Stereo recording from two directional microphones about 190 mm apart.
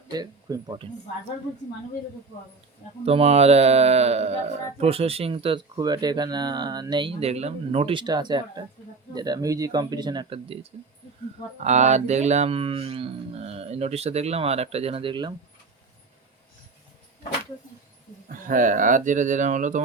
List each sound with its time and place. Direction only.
0.1 s speech: 20° right (ahead or behind)
3.1 s speech: 35° right (ahead or behind)
18.3 s speech: 45° right (ahead or behind)